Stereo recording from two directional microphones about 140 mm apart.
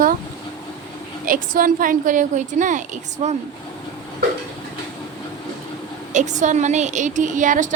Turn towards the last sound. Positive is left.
turn(degrees=-65)  # may be behind; listen again after turning